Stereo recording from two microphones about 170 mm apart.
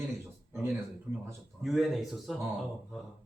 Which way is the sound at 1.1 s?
10° right (ahead or behind).